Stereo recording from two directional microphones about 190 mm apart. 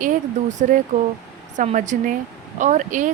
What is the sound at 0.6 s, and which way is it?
Speech, 40° right (ahead or behind).